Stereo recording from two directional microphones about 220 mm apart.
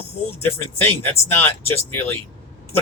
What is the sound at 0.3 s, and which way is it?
Speech, 10° left (ahead or behind).